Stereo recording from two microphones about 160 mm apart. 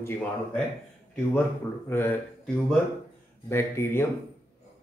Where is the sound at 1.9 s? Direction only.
15° left (ahead or behind).